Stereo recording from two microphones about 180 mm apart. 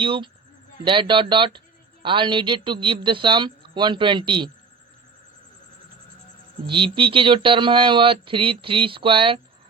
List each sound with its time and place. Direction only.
0.0 s speech: 30° right (ahead or behind)
6.7 s speech: 30° right (ahead or behind)